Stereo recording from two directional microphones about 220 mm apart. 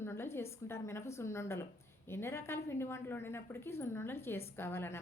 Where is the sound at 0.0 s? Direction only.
10° left (ahead or behind).